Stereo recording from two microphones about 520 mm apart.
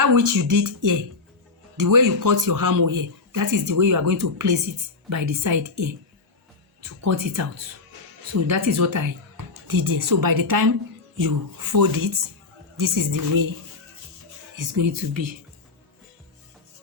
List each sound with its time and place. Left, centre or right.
0.0 s speech: right
14.5 s speech: right